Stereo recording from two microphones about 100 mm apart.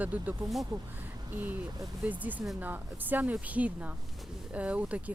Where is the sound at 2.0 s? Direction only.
15° right (ahead or behind).